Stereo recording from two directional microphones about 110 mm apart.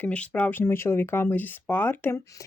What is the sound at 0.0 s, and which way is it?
Speech, 15° left (ahead or behind).